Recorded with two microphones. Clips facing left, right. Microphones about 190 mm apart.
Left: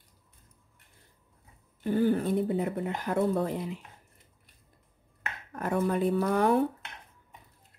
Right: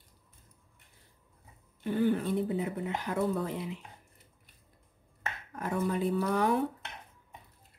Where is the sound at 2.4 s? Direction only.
55° left (ahead or behind).